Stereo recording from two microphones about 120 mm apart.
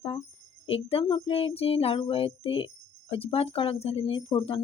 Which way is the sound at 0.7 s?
50° left (ahead or behind).